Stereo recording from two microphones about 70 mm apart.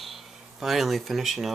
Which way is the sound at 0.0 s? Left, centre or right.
Centre.